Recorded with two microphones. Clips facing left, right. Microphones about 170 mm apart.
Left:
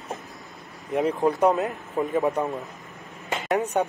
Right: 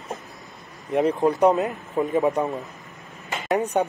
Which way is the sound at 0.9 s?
Centre (ahead or behind).